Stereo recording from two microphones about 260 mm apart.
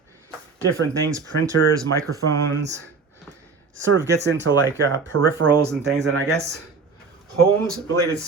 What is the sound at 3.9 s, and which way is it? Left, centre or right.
Speech, right.